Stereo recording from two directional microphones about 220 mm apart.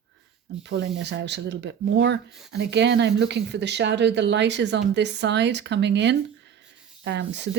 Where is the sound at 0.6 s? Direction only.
50° right (ahead or behind).